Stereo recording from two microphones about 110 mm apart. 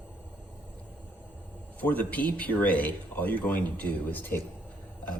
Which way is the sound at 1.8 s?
15° left (ahead or behind).